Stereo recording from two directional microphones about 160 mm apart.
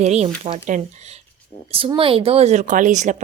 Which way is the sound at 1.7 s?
35° right (ahead or behind).